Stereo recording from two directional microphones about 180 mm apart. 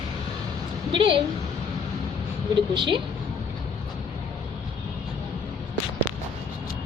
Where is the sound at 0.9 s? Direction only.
30° right (ahead or behind).